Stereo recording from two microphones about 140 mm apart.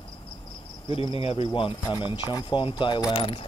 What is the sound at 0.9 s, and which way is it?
Speech, 40° left (ahead or behind).